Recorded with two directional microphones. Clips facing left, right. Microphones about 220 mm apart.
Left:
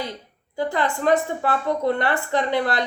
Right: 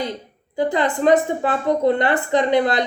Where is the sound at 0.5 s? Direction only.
20° right (ahead or behind).